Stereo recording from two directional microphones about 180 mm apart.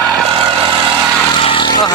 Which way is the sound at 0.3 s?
25° right (ahead or behind).